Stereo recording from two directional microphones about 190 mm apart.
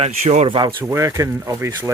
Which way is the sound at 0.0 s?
35° right (ahead or behind).